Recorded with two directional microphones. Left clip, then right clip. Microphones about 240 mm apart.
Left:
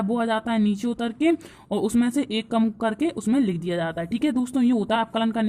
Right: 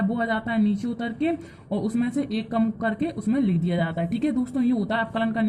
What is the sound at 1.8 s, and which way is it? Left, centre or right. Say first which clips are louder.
A woman's voice: left 4 dB; left.